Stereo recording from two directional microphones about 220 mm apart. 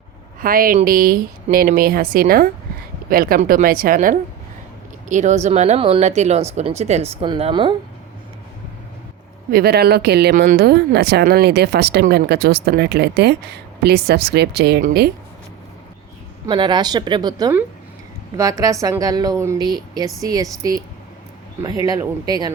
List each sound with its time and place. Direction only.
0.4 s speech: 40° right (ahead or behind); by 7.8 s 20° right (ahead or behind)
9.5 s speech: 45° right (ahead or behind)
16.5 s a woman's voice: 20° right (ahead or behind)